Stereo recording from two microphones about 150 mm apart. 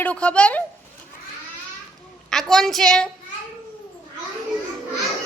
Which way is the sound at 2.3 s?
Centre (ahead or behind).